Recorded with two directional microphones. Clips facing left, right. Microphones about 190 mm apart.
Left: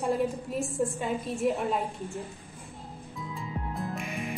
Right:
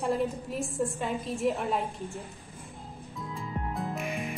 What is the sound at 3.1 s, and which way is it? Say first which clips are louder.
Music: even; centre (ahead or behind).